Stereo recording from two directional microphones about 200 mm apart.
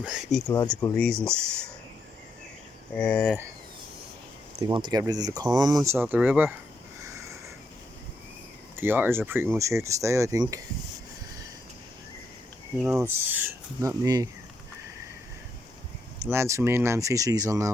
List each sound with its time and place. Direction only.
0.0 s speech: centre (ahead or behind)
3.1 s speech: 5° left (ahead or behind)
4.6 s speech: 20° right (ahead or behind)
8.7 s speech: 10° right (ahead or behind)
12.8 s speech: 5° right (ahead or behind)
16.3 s speech: 15° right (ahead or behind)